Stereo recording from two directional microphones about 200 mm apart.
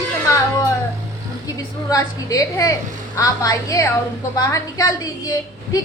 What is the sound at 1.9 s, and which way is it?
A woman's voice, 15° left (ahead or behind).